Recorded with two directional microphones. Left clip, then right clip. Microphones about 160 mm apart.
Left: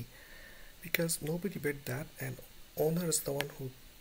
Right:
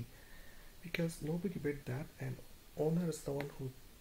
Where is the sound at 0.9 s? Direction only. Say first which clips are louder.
Left 6 dB; 15° left (ahead or behind).